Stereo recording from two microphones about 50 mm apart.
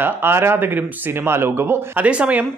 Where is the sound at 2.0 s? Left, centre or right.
Right.